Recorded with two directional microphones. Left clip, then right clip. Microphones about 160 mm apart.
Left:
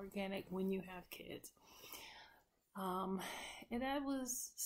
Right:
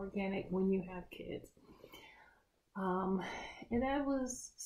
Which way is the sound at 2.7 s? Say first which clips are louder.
Right 5 dB; 15° left (ahead or behind).